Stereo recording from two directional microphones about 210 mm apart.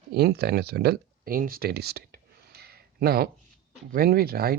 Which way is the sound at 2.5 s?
50° right (ahead or behind).